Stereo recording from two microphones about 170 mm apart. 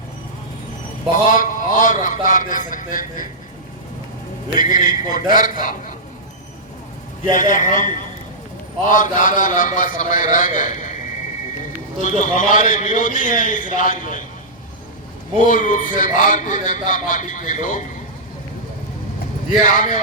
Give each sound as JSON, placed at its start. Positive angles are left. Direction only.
{"t": 1.1, "sound": "a man's voice", "side_deg": 50}
{"t": 4.5, "sound": "a man's voice", "side_deg": 50}
{"t": 7.3, "sound": "a man's voice", "side_deg": 50}
{"t": 12.2, "sound": "a man's voice", "side_deg": 50}
{"t": 15.4, "sound": "a man's voice", "side_deg": 50}
{"t": 19.6, "sound": "a man's voice", "side_deg": 50}